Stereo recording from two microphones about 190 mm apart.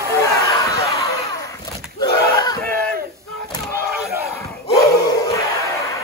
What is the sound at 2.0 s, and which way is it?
Battle cry, 20° left (ahead or behind).